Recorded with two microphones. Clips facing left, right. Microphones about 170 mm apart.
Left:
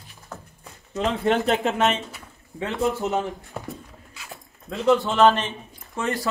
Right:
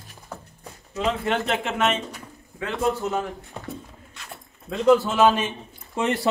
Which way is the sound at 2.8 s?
Centre (ahead or behind).